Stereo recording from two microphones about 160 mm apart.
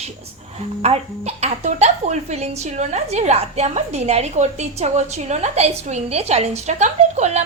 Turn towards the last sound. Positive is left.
turn(degrees=-45)  # may be behind; listen again after turning